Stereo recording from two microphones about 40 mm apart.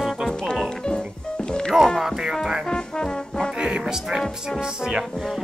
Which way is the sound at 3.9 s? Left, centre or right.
Centre.